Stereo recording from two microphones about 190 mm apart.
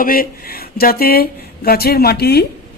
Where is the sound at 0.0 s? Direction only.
50° left (ahead or behind).